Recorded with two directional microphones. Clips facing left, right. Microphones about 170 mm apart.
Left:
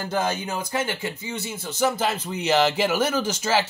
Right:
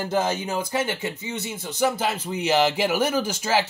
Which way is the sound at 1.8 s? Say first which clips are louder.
Even; 10° right (ahead or behind).